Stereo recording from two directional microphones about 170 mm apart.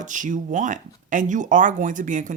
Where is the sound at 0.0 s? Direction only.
50° right (ahead or behind).